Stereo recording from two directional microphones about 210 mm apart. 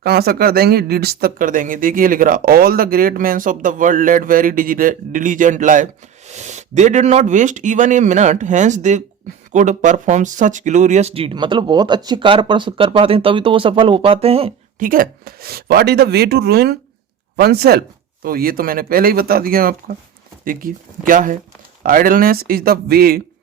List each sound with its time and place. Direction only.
0.0 s speech: 50° right (ahead or behind); by 14.5 s 25° right (ahead or behind)
14.8 s speech: 40° right (ahead or behind)